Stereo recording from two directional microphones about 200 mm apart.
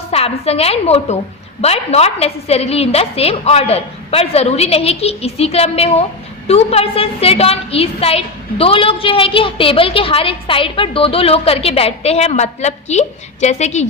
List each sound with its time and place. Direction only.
0.1 s a woman's voice: 30° left (ahead or behind)